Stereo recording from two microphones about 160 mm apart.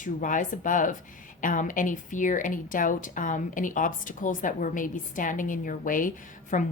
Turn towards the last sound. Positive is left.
turn(degrees=55)  # may be behind; listen again after turning